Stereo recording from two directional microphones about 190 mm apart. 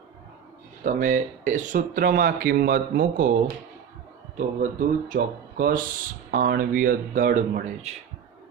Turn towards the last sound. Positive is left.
turn(degrees=-40)  # may be behind; listen again after turning